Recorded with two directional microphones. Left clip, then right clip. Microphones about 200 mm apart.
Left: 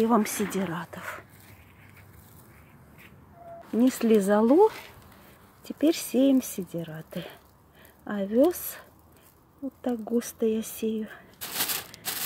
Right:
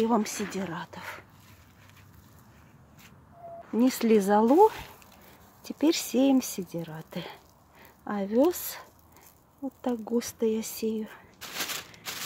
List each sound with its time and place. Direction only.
0.0 s speech: centre (ahead or behind)
3.8 s speech: 5° right (ahead or behind)
11.3 s a sound: 40° left (ahead or behind)